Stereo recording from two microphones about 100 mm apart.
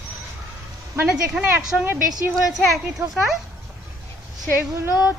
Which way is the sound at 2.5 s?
Centre (ahead or behind).